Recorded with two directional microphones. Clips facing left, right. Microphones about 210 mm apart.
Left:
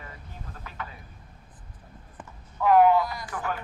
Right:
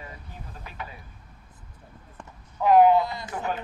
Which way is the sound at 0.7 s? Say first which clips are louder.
Even; 15° right (ahead or behind).